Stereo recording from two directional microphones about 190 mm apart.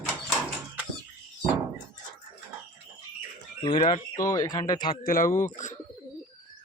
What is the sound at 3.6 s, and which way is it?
Speech, 25° left (ahead or behind).